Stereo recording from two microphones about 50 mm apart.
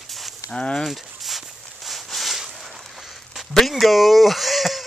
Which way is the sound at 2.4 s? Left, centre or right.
Centre.